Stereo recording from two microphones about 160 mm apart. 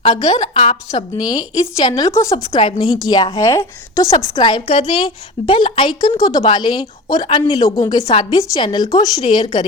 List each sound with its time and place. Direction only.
0.0 s a woman's voice: 30° left (ahead or behind)
0.5 s a woman's voice: 40° left (ahead or behind)
0.9 s a woman's voice: 25° left (ahead or behind)
2.5 s a woman's voice: 35° left (ahead or behind)
3.1 s a woman's voice: 25° left (ahead or behind)